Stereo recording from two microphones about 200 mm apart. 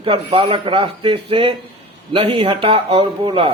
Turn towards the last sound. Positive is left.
turn(degrees=-25)  # may be behind; listen again after turning